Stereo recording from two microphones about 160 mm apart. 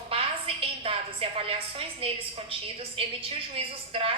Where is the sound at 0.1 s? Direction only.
35° right (ahead or behind).